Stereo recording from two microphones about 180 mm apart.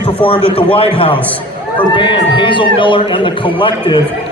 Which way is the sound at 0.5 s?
30° left (ahead or behind).